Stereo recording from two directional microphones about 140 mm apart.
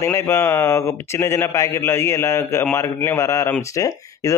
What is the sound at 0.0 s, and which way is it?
A man's voice, 20° left (ahead or behind).